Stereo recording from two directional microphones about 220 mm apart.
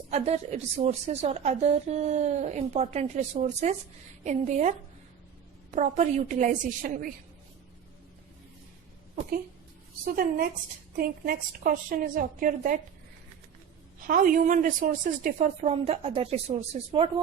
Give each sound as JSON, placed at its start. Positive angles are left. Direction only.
{"t": 0.1, "sound": "a woman's voice", "side_deg": -30}
{"t": 5.7, "sound": "a woman's voice", "side_deg": -35}
{"t": 10.9, "sound": "a woman's voice", "side_deg": -40}
{"t": 14.1, "sound": "a woman's voice", "side_deg": -40}